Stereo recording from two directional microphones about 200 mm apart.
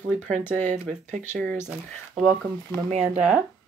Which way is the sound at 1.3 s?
10° left (ahead or behind).